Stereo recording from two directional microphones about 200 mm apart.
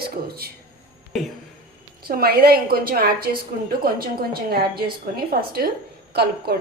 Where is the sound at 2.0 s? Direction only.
50° right (ahead or behind).